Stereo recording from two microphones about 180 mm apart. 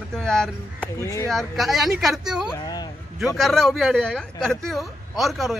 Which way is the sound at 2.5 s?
20° left (ahead or behind).